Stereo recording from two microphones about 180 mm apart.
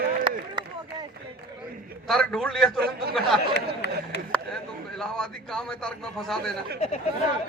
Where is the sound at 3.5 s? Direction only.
70° left (ahead or behind).